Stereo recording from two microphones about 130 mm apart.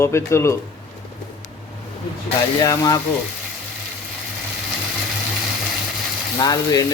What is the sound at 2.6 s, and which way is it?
Speech, 30° left (ahead or behind).